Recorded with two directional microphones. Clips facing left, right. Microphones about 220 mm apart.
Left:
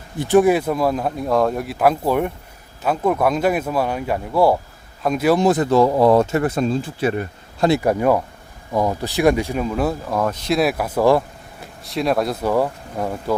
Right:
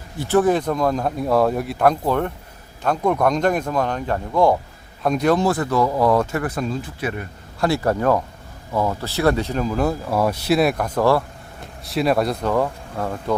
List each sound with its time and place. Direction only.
0.2 s speech: 15° left (ahead or behind)
5.5 s speech: 25° left (ahead or behind)
11.6 s speech: centre (ahead or behind)